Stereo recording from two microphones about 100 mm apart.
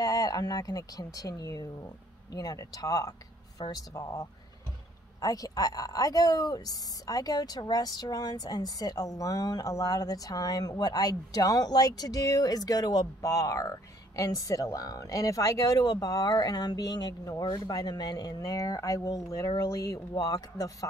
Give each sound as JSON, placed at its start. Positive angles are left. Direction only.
{"t": 0.0, "sound": "speech", "side_deg": 40}